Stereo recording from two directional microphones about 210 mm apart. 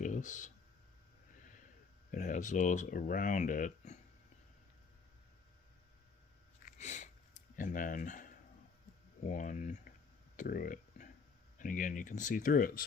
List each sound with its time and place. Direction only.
0.0 s clicking: 35° left (ahead or behind)
2.1 s speech: 35° left (ahead or behind)
6.7 s a sound: 35° left (ahead or behind)
7.5 s speech: 40° left (ahead or behind)
10.3 s a sound: 40° left (ahead or behind)
11.6 s speech: 40° left (ahead or behind)